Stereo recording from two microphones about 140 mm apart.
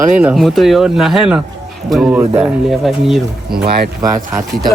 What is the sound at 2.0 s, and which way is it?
Speech, 15° right (ahead or behind).